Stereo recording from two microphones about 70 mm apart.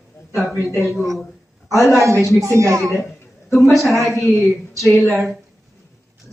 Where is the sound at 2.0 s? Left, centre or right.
Right.